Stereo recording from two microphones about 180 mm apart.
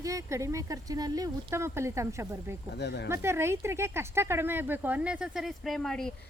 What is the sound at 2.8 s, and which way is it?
Speech, 70° left (ahead or behind).